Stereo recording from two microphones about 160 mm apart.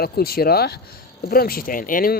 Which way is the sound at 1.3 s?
65° left (ahead or behind).